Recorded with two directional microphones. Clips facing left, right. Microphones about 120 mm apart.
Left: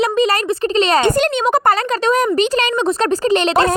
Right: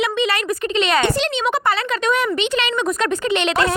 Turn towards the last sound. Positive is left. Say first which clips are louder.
# left 4 dB
turn(degrees=35)  # may be behind; listen again after turning